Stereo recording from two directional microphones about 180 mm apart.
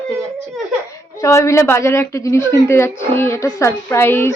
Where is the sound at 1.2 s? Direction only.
15° left (ahead or behind).